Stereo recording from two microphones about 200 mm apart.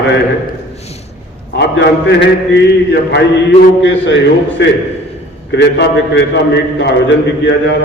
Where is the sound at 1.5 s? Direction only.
60° left (ahead or behind).